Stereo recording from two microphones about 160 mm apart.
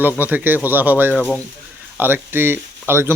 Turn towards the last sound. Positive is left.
turn(degrees=-15)  # may be behind; listen again after turning